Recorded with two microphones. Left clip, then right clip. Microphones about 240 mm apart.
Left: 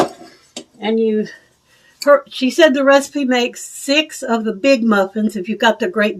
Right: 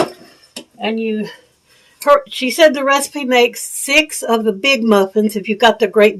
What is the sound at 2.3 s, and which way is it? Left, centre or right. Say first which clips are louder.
A woman's voice: right 1 dB; right.